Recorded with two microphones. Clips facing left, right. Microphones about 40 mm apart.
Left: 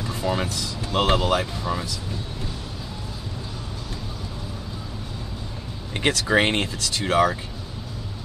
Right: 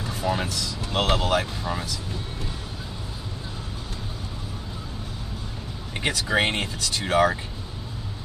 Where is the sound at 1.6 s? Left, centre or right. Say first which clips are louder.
Left 2 dB; right.